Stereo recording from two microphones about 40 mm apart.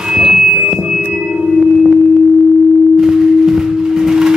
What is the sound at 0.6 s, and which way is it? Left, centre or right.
Music, right.